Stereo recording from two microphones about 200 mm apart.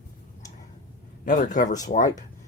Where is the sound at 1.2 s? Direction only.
40° left (ahead or behind).